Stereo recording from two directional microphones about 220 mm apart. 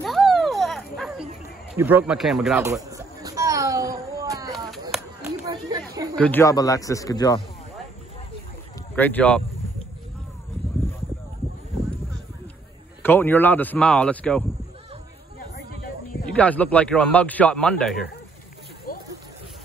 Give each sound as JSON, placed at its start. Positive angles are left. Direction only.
{"t": 0.0, "sound": "a sound", "side_deg": 0}
{"t": 1.8, "sound": "speech", "side_deg": -10}
{"t": 2.6, "sound": "a sound", "side_deg": -15}
{"t": 5.2, "sound": "chatter", "side_deg": -15}
{"t": 6.1, "sound": "a man's voice", "side_deg": 5}
{"t": 8.9, "sound": "a man's voice", "side_deg": 10}
{"t": 13.0, "sound": "a man's voice", "side_deg": 10}
{"t": 15.5, "sound": "a sound", "side_deg": 45}
{"t": 16.3, "sound": "a man's voice", "side_deg": 5}